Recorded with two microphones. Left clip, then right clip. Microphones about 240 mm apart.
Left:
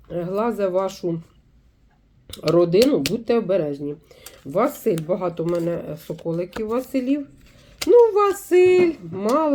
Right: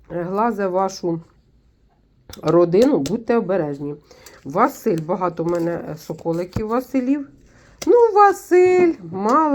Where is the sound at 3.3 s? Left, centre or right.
Right.